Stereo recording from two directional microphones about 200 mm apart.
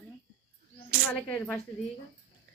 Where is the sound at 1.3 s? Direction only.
10° left (ahead or behind).